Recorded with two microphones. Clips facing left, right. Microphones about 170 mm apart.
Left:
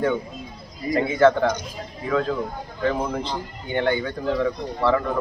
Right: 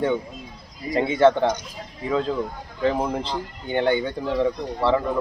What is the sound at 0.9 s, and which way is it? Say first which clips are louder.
A man's voice: even; 30° right (ahead or behind).